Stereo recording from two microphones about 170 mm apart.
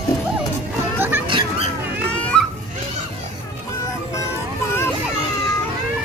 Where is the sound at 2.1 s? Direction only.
5° left (ahead or behind).